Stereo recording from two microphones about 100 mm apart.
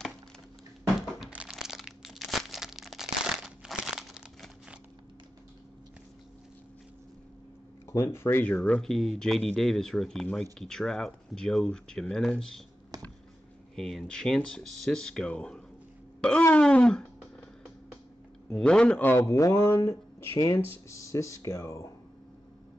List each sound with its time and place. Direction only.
1.3 s crumpling: 10° right (ahead or behind)
7.9 s speech: 25° left (ahead or behind)
8.5 s speech: 15° left (ahead or behind)
8.8 s speech: 5° left (ahead or behind)
13.7 s speech: 5° left (ahead or behind)
16.2 s throat clearing: 10° left (ahead or behind)
18.5 s speech: 10° left (ahead or behind)
19.2 s speech: 30° left (ahead or behind)